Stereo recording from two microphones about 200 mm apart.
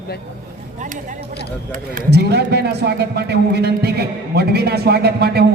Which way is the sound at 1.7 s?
50° right (ahead or behind).